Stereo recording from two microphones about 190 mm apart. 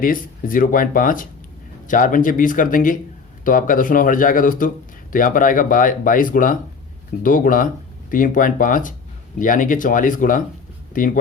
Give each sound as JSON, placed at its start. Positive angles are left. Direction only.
{"t": 0.0, "sound": "speech", "side_deg": 45}